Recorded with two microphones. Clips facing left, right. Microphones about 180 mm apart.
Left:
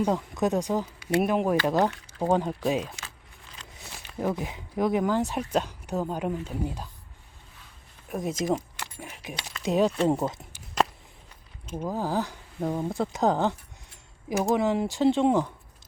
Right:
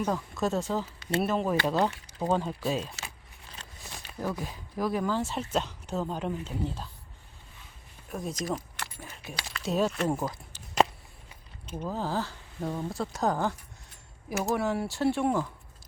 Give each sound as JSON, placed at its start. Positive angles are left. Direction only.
{"t": 0.0, "sound": "speech", "side_deg": 20}
{"t": 4.2, "sound": "speech", "side_deg": 20}
{"t": 8.1, "sound": "speech", "side_deg": 20}
{"t": 11.7, "sound": "speech", "side_deg": 10}
{"t": 14.5, "sound": "speech", "side_deg": 15}